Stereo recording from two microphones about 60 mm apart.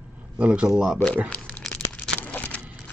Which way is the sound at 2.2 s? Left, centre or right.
Left.